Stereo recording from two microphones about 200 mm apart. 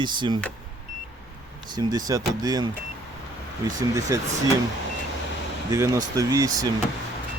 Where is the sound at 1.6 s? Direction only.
20° right (ahead or behind).